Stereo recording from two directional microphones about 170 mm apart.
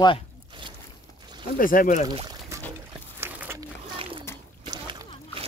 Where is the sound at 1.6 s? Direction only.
55° left (ahead or behind).